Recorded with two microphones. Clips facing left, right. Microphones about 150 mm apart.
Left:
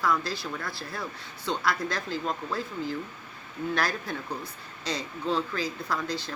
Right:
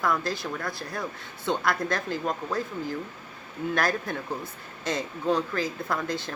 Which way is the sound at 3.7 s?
50° right (ahead or behind).